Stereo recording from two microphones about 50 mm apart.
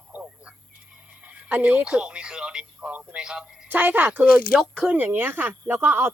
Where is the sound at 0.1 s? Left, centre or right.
Right.